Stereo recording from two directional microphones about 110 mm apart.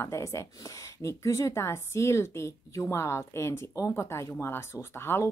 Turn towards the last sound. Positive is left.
turn(degrees=20)  # may be behind; listen again after turning